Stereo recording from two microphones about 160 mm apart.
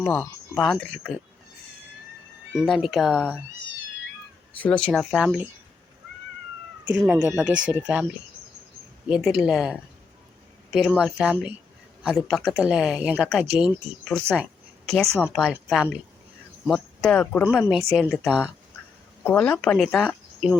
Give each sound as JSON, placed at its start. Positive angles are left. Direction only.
{"t": 0.0, "sound": "speech", "side_deg": 10}
{"t": 0.6, "sound": "speech", "side_deg": 0}
{"t": 2.6, "sound": "speech", "side_deg": 0}
{"t": 4.5, "sound": "speech", "side_deg": 10}
{"t": 6.8, "sound": "speech", "side_deg": -10}
{"t": 9.0, "sound": "speech", "side_deg": -5}